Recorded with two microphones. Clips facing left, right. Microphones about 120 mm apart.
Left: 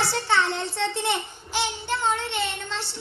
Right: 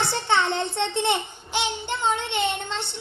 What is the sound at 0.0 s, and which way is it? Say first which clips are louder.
Child singing: right 1 dB; 20° right (ahead or behind).